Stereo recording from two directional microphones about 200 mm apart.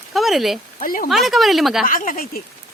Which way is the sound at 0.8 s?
45° left (ahead or behind).